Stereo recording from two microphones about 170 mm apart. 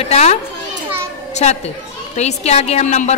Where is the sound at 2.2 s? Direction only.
40° left (ahead or behind).